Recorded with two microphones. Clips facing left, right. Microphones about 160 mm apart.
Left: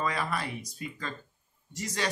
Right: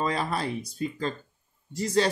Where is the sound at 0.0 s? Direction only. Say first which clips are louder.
Right 4 dB; 30° right (ahead or behind).